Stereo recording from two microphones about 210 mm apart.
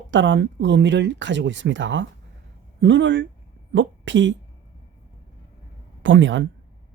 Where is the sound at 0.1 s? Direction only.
60° right (ahead or behind).